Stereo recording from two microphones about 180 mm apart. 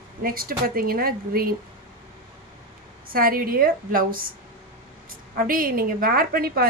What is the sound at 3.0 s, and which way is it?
A woman's voice, 55° right (ahead or behind).